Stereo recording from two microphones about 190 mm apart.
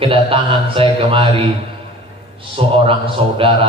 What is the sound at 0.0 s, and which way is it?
A man's voice, 30° right (ahead or behind).